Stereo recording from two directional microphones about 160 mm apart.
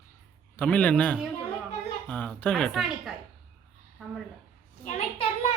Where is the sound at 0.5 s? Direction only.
10° left (ahead or behind).